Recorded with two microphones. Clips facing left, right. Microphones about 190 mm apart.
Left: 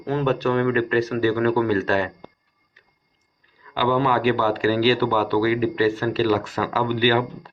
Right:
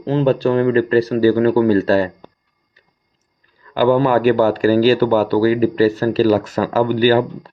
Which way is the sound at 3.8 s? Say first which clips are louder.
Right 7 dB; 45° right (ahead or behind).